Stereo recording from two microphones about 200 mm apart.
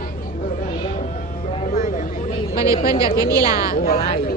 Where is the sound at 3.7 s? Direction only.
45° left (ahead or behind).